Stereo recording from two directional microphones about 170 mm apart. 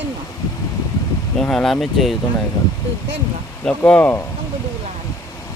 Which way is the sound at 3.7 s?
10° left (ahead or behind).